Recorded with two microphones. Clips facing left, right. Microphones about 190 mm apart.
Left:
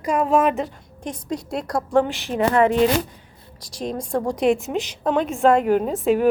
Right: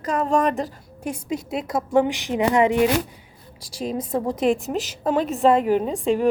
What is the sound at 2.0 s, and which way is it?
A woman's voice, 15° right (ahead or behind).